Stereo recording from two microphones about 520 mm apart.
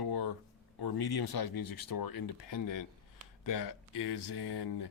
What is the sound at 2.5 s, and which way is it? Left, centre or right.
Speech, left.